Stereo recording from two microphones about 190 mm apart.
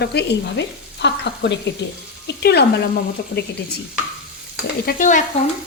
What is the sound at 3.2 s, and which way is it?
Stir, 55° left (ahead or behind).